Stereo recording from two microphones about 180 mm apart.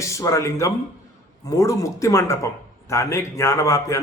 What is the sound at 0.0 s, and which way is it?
A man's voice, 15° left (ahead or behind).